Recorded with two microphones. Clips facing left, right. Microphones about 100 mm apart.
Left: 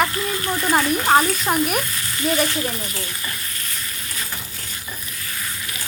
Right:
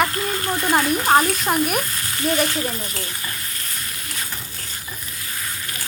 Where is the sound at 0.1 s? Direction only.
45° right (ahead or behind).